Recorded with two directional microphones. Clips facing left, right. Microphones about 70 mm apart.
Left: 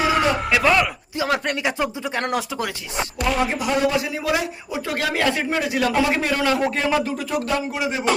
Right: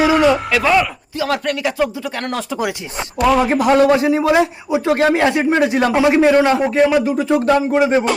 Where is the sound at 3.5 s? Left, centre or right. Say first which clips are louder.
Right 9 dB; right.